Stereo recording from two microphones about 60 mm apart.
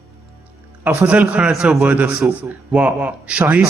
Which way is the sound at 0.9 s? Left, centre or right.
Right.